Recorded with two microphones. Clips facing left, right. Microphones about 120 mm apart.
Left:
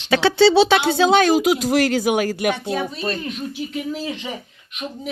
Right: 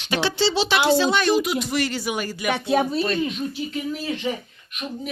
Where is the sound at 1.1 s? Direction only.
90° left.